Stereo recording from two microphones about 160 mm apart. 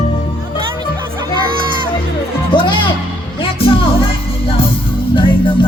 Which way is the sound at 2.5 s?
30° left (ahead or behind).